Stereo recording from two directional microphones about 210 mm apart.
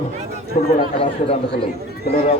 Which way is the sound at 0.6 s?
35° left (ahead or behind).